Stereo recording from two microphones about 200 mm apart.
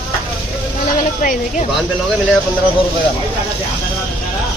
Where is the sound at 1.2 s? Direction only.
40° left (ahead or behind).